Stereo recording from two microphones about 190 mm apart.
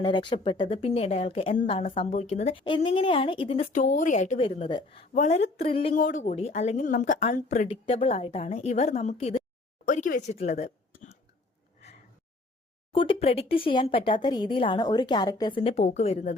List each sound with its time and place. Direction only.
0.0 s a woman's voice: 25° left (ahead or behind)
2.6 s a woman's voice: 25° left (ahead or behind)
6.0 s a woman's voice: 40° left (ahead or behind)
12.9 s speech: 25° left (ahead or behind)